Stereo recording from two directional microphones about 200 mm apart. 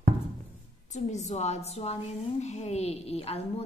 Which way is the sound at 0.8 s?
35° left (ahead or behind).